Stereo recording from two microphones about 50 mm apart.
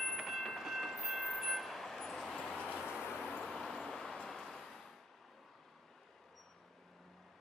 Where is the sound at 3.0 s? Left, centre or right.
Left.